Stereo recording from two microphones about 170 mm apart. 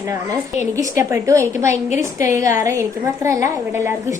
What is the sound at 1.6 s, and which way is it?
Speech, 45° left (ahead or behind).